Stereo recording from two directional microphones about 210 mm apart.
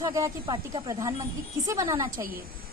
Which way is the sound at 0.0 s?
15° right (ahead or behind).